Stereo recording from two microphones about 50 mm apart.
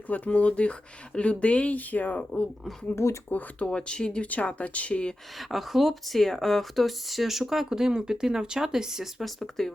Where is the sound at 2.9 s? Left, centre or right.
Left.